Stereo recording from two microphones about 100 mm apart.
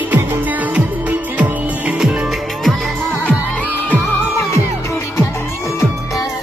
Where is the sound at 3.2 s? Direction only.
15° left (ahead or behind).